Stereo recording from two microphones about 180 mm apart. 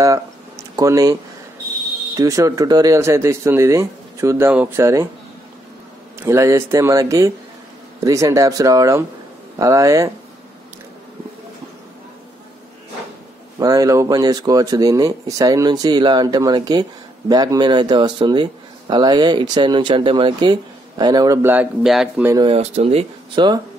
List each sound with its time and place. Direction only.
0.0 s a sound: 20° right (ahead or behind)
2.1 s speech: 20° right (ahead or behind)
6.1 s speech: 15° right (ahead or behind)
13.6 s speech: 20° right (ahead or behind); by 22.3 s 5° right (ahead or behind)
22.3 s speech: 30° right (ahead or behind)